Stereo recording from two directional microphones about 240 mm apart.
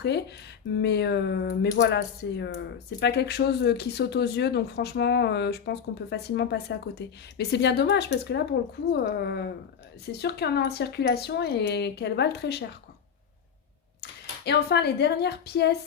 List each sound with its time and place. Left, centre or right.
0.0 s speech: left
14.0 s speech: left